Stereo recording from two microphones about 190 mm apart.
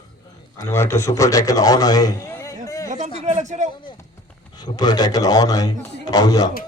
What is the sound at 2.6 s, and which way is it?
Chatter, 15° left (ahead or behind).